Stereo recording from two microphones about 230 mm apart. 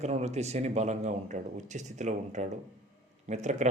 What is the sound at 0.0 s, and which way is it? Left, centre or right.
A man's voice, right.